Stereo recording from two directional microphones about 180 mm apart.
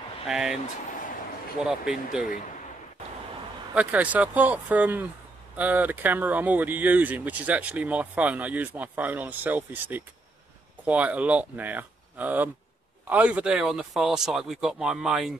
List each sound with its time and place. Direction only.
0.3 s speech: 5° right (ahead or behind)
1.6 s speech: 5° right (ahead or behind)
3.7 s speech: 10° right (ahead or behind)